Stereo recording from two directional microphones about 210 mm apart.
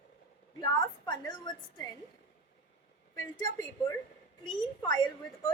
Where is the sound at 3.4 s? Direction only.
15° left (ahead or behind).